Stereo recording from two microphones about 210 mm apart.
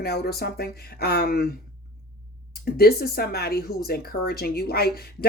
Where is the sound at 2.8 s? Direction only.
45° left (ahead or behind).